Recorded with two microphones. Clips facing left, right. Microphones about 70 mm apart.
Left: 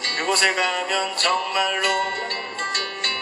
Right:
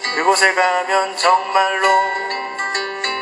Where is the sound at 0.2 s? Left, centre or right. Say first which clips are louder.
Right 7 dB; right.